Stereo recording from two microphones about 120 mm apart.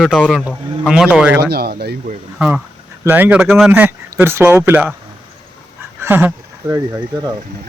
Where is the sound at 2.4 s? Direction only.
10° right (ahead or behind).